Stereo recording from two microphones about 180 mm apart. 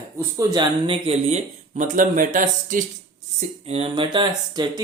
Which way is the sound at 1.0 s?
35° right (ahead or behind).